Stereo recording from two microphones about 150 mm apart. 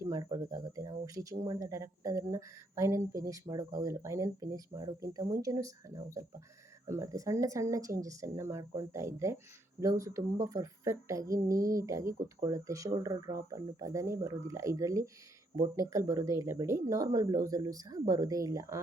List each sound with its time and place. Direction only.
0.0 s speech: 20° right (ahead or behind)